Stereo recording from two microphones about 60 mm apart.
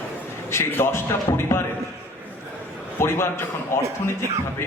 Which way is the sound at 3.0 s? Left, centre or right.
Left.